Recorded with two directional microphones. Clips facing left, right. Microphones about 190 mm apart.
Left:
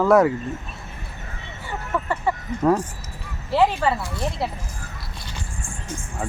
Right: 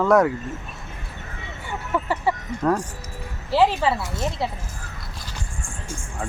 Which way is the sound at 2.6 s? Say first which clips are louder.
Left 3 dB; 5° left (ahead or behind).